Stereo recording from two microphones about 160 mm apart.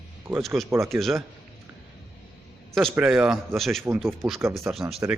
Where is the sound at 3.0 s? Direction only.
5° right (ahead or behind).